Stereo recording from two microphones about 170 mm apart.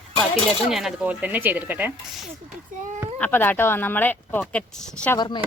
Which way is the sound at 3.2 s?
10° left (ahead or behind).